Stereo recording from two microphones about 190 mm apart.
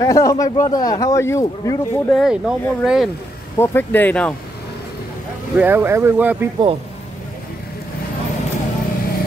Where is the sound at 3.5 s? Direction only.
10° left (ahead or behind).